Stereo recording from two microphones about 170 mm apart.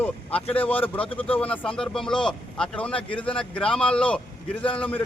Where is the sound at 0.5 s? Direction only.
10° left (ahead or behind).